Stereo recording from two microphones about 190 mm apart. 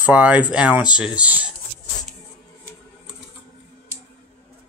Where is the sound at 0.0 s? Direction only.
5° right (ahead or behind).